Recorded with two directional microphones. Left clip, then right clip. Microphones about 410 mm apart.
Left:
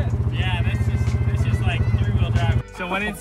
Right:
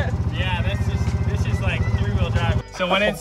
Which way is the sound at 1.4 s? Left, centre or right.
Centre.